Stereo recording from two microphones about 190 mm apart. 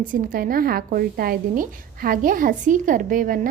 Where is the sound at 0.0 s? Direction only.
45° right (ahead or behind).